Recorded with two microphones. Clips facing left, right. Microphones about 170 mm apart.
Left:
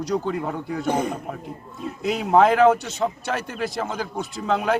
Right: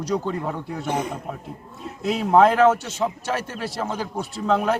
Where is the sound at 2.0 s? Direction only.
Centre (ahead or behind).